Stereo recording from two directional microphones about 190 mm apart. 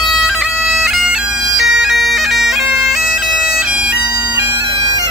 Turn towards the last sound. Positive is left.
turn(degrees=-5)  # may be behind; listen again after turning